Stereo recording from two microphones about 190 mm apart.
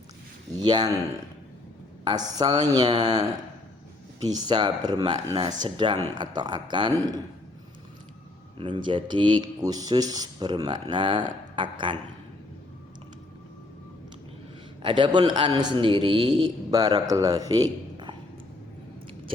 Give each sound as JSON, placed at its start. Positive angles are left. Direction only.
{"t": 0.6, "sound": "speech", "side_deg": -20}
{"t": 2.0, "sound": "speech", "side_deg": -20}
{"t": 4.2, "sound": "speech", "side_deg": -20}
{"t": 8.5, "sound": "speech", "side_deg": -25}
{"t": 14.8, "sound": "speech", "side_deg": -25}